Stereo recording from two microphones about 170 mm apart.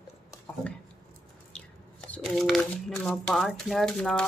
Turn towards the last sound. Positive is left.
turn(degrees=5)  # may be behind; listen again after turning